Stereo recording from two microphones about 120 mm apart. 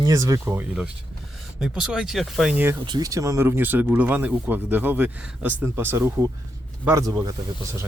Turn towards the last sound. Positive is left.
turn(degrees=-30)  # may be behind; listen again after turning